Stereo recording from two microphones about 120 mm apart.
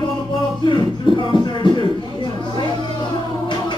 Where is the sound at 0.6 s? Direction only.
40° left (ahead or behind).